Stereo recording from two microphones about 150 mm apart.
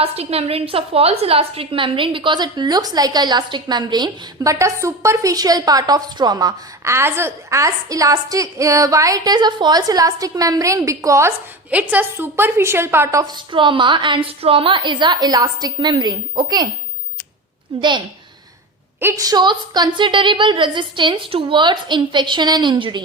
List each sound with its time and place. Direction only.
0.0 s a woman's voice: 40° right (ahead or behind)
17.7 s a woman's voice: 30° right (ahead or behind)
18.9 s a woman's voice: 20° right (ahead or behind)